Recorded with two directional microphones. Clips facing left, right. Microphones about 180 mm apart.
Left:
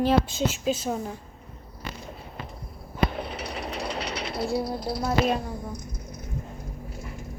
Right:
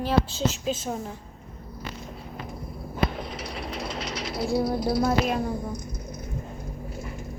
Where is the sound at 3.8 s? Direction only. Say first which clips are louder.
Left 1 dB; 65° left (ahead or behind).